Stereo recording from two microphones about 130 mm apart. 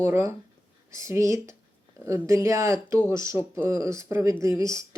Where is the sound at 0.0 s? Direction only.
20° right (ahead or behind).